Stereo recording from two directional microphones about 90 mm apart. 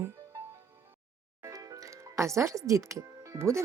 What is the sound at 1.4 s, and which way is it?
Speech, 40° right (ahead or behind).